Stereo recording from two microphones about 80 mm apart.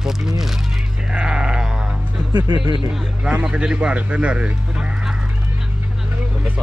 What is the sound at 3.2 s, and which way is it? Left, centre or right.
Speech, centre.